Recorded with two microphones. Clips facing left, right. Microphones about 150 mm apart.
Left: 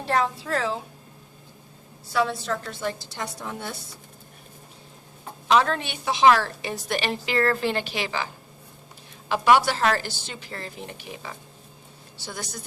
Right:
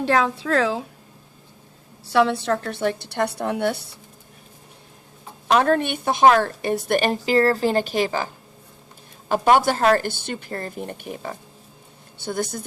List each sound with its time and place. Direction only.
0.0 s a woman's voice: 90° right
2.0 s a woman's voice: 65° right (ahead or behind)
5.5 s a woman's voice: 50° right (ahead or behind)
9.3 s a woman's voice: 45° right (ahead or behind)